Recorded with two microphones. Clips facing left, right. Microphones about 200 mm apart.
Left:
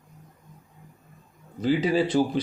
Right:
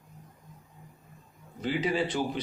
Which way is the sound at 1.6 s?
35° left (ahead or behind).